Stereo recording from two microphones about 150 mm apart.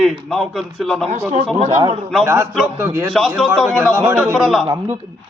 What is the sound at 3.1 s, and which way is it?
A man's voice, centre (ahead or behind).